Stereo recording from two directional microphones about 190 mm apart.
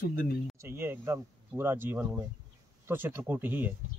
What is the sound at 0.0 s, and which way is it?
Speech, 50° left (ahead or behind).